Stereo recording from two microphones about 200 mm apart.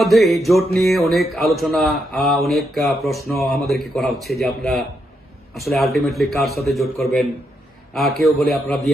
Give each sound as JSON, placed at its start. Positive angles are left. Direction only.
{"t": 0.0, "sound": "music", "side_deg": 0}